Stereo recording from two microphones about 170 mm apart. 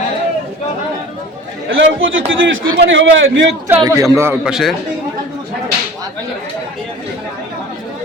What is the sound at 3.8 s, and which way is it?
Speech, 20° right (ahead or behind).